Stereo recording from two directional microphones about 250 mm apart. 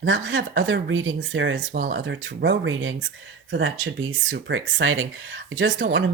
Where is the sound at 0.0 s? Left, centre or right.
Right.